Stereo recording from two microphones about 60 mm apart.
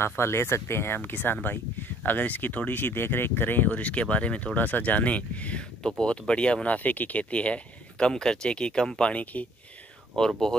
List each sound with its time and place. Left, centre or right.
0.0 s speech: left
5.8 s speech: centre
9.2 s speech: left
10.1 s speech: centre